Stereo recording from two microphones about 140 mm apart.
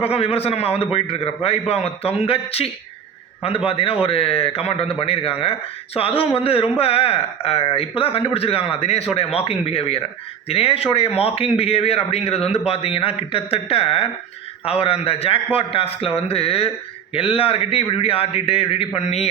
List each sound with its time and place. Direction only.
0.0 s a man's voice: 45° left (ahead or behind)